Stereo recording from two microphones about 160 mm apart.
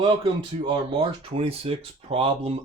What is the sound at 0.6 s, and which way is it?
Speech, 30° right (ahead or behind).